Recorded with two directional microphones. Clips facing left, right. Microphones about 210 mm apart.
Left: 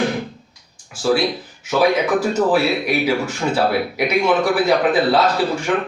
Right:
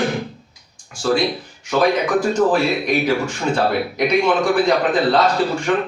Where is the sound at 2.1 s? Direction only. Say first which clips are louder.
Right 1 dB; 5° left (ahead or behind).